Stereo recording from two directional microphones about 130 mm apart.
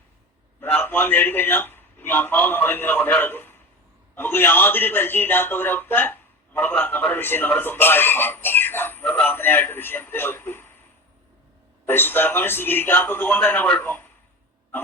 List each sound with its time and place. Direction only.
0.6 s a man's voice: 15° left (ahead or behind)
11.9 s a man's voice: 15° left (ahead or behind)